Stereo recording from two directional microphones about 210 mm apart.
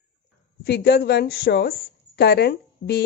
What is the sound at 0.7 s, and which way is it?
A woman's voice, 50° left (ahead or behind).